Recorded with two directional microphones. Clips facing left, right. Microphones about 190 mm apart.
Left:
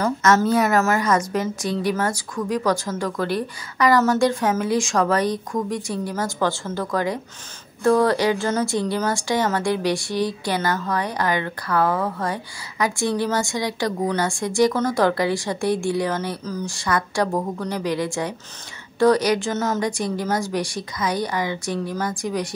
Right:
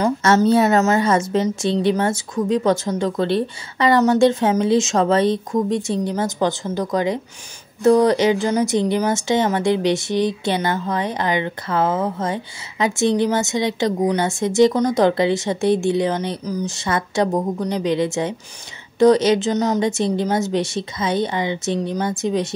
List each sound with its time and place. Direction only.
0.2 s a woman's voice: 30° right (ahead or behind)